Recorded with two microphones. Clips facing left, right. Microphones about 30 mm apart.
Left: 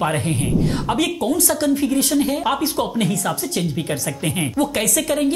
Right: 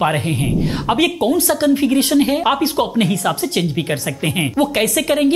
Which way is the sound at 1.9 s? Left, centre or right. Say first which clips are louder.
Right 4 dB; right.